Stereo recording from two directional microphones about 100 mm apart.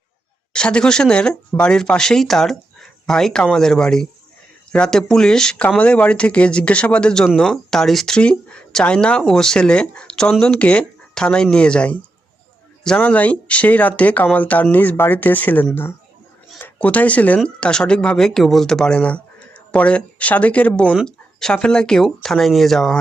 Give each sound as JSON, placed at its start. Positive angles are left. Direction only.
{"t": 0.5, "sound": "speech", "side_deg": 10}